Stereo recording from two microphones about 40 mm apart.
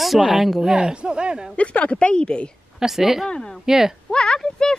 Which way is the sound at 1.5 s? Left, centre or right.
Left.